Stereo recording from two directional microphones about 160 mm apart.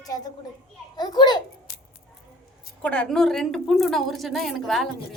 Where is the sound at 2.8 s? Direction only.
5° left (ahead or behind).